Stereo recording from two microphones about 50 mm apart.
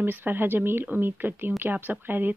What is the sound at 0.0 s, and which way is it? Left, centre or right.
A woman's voice, right.